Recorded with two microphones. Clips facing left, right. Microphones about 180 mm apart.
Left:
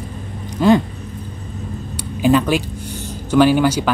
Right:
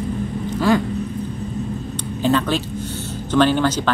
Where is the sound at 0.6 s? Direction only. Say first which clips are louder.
Left 4 dB; 20° left (ahead or behind).